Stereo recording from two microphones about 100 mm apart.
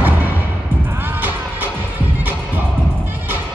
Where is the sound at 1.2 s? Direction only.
20° right (ahead or behind).